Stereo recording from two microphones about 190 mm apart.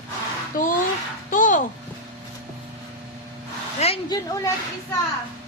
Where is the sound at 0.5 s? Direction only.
45° left (ahead or behind).